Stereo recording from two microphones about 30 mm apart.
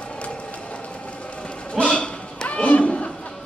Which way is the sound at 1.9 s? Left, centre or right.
Left.